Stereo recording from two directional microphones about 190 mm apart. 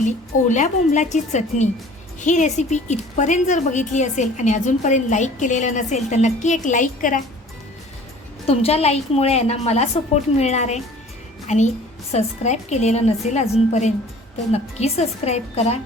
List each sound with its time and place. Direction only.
0.0 s a woman's voice: 40° left (ahead or behind)
8.4 s a woman's voice: 30° left (ahead or behind)